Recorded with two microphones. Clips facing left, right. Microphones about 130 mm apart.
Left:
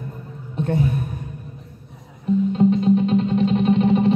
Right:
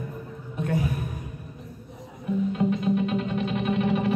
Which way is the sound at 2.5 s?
30° left (ahead or behind).